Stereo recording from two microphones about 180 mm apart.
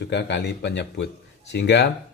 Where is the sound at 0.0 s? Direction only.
70° left (ahead or behind).